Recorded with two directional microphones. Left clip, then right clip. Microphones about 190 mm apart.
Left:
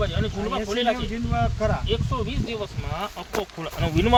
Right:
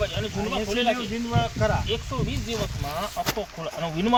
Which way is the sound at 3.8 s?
55° left (ahead or behind).